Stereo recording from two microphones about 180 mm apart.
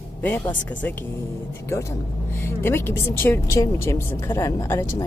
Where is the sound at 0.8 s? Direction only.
10° left (ahead or behind).